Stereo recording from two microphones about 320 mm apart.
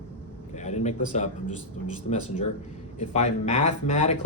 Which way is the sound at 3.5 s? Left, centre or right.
Left.